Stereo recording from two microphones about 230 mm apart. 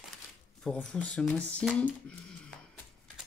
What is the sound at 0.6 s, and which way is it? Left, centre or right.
Speech, centre.